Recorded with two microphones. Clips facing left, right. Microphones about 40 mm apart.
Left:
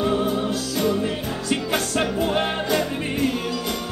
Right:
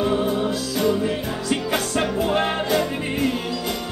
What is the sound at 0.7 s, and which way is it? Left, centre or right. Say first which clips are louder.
Music: right 2 dB; centre.